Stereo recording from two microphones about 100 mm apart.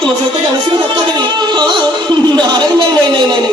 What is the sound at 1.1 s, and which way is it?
Music, 50° right (ahead or behind).